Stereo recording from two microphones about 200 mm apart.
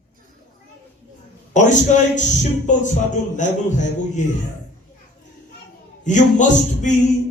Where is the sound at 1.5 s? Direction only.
35° left (ahead or behind).